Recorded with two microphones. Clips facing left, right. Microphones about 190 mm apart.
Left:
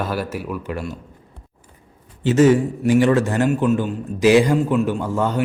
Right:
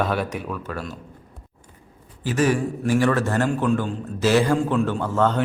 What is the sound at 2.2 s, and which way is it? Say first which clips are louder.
Speech: left 7 dB; 25° left (ahead or behind).